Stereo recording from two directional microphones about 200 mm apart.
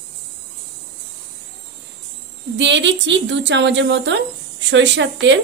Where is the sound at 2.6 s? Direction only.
65° right (ahead or behind).